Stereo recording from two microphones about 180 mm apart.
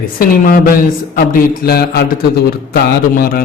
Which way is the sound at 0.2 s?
55° left (ahead or behind).